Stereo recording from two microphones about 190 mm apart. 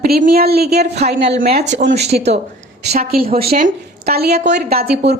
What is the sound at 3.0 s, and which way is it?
A woman's voice, 50° right (ahead or behind).